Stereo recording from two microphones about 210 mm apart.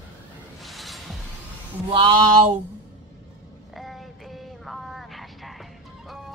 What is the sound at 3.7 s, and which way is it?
Vehicle, centre (ahead or behind).